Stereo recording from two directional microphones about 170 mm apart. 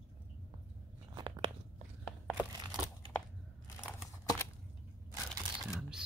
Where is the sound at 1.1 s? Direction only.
25° right (ahead or behind).